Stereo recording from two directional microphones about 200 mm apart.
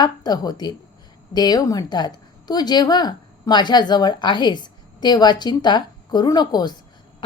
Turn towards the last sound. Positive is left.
turn(degrees=20)  # may be behind; listen again after turning